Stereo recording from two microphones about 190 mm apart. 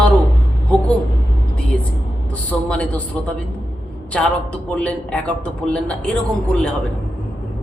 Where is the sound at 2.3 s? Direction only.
5° left (ahead or behind).